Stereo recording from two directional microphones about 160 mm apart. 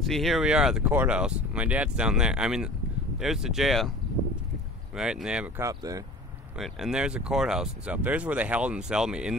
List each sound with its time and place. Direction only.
0.0 s speech: centre (ahead or behind)
4.9 s speech: 5° right (ahead or behind)
5.6 s speech: 20° right (ahead or behind)
6.6 s speech: 5° right (ahead or behind)